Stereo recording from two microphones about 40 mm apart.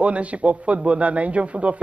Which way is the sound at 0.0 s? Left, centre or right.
Right.